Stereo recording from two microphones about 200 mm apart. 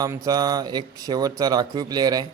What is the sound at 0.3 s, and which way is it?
A man's voice, 20° right (ahead or behind).